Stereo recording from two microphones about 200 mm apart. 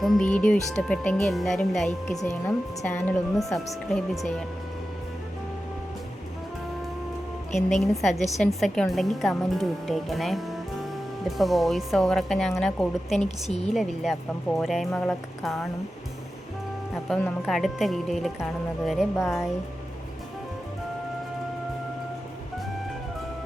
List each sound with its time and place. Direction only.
0.0 s speech: 5° left (ahead or behind)
7.8 s speech: centre (ahead or behind)
13.2 s a woman's voice: 30° left (ahead or behind)
13.7 s speech: centre (ahead or behind)
17.1 s speech: 5° left (ahead or behind)
19.1 s speech: 15° left (ahead or behind)